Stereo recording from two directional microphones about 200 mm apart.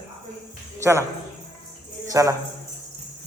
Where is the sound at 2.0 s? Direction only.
15° right (ahead or behind).